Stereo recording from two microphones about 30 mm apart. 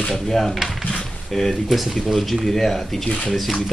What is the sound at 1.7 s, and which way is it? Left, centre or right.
Speech, centre.